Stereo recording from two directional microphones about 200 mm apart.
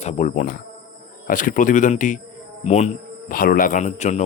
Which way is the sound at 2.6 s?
35° left (ahead or behind).